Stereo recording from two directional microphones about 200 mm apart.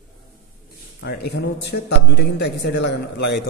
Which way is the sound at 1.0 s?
55° left (ahead or behind).